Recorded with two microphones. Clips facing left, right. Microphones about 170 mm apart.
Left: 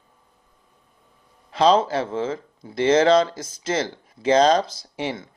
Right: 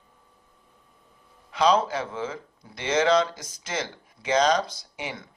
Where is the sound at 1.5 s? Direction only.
30° left (ahead or behind).